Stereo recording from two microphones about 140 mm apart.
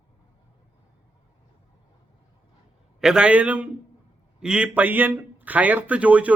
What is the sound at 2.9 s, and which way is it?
Speech, 5° right (ahead or behind).